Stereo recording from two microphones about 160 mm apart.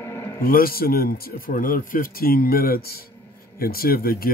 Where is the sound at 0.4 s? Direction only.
65° left (ahead or behind).